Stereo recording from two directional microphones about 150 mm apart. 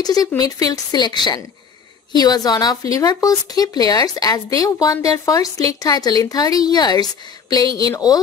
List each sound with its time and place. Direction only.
0.0 s a woman's voice: 25° left (ahead or behind)